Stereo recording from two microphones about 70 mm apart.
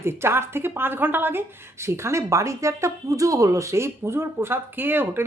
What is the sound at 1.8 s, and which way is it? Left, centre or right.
A woman's voice, right.